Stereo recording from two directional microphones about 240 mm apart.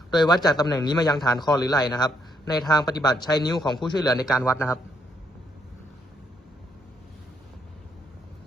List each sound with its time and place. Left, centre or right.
0.1 s a man's voice: centre